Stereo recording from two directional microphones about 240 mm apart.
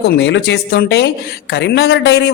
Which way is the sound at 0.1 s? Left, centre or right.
Left.